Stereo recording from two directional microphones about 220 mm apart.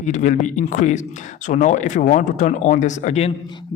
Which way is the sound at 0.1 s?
35° left (ahead or behind).